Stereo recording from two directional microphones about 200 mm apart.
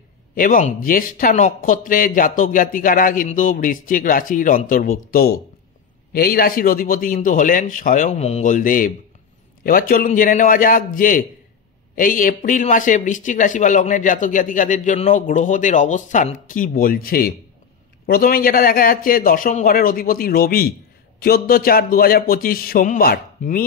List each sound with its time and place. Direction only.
0.4 s a man's voice: 40° left (ahead or behind)